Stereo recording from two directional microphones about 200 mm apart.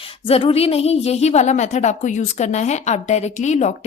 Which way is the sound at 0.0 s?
30° left (ahead or behind).